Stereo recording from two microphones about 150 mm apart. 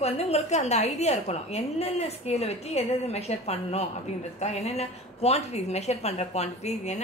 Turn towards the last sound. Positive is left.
turn(degrees=50)  # may be behind; listen again after turning